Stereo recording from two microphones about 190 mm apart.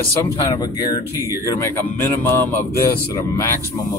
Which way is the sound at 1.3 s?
15° left (ahead or behind).